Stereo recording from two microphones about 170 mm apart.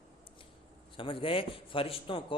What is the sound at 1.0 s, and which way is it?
A man's voice, 30° left (ahead or behind).